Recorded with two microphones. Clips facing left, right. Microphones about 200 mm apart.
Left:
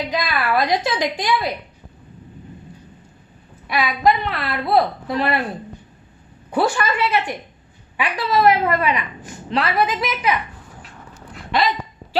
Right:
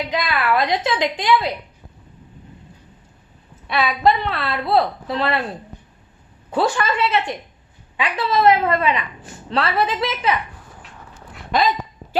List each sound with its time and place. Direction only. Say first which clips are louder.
0.1 s a woman's voice: right 2 dB; 20° right (ahead or behind)
3.7 s a woman's voice: even; 30° right (ahead or behind)
6.5 s a woman's voice: even; 25° right (ahead or behind)